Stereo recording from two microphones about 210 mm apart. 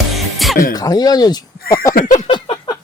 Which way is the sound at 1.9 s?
35° left (ahead or behind).